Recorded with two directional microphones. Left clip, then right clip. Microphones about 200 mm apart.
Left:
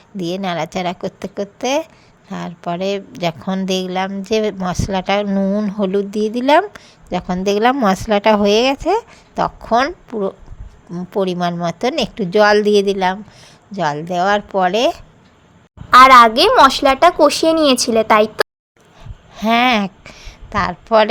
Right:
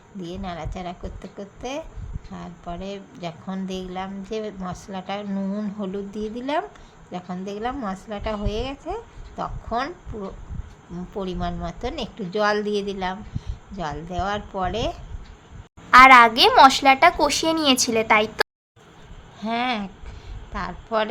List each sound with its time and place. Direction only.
0.2 s a woman's voice: 50° left (ahead or behind)
15.9 s a woman's voice: 15° left (ahead or behind)
19.4 s a woman's voice: 50° left (ahead or behind)